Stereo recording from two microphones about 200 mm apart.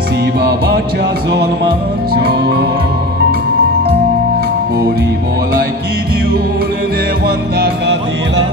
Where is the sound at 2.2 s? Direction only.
50° right (ahead or behind).